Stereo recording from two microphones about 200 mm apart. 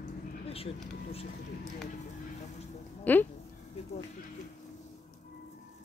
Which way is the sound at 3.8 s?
30° left (ahead or behind).